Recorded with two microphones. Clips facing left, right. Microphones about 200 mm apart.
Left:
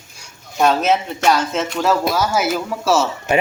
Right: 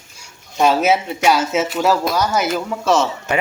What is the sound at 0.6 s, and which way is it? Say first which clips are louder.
Speech: right 1 dB; 5° right (ahead or behind).